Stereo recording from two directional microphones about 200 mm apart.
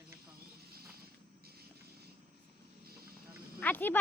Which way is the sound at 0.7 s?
50° right (ahead or behind).